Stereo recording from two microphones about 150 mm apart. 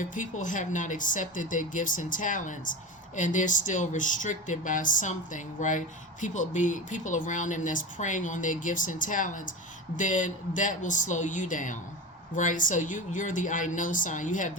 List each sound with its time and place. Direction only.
0.0 s speech: 60° left (ahead or behind)